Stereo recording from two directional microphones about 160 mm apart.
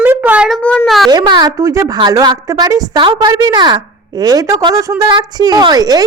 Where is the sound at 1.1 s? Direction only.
25° right (ahead or behind).